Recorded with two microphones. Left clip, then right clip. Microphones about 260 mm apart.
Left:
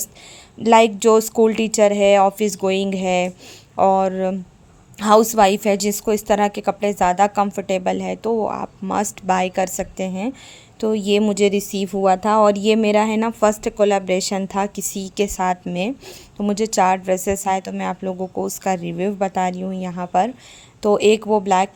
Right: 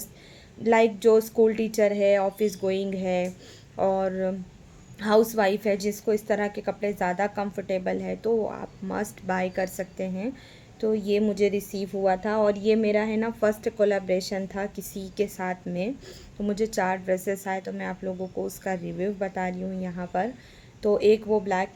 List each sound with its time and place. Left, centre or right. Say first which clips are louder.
0.6 s speech: left 7 dB; left